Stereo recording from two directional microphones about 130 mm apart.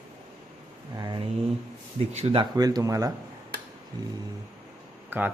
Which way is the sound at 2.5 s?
30° right (ahead or behind).